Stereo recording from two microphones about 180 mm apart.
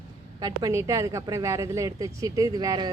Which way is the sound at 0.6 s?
15° right (ahead or behind).